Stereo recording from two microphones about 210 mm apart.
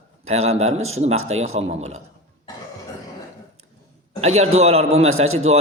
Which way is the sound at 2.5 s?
15° left (ahead or behind).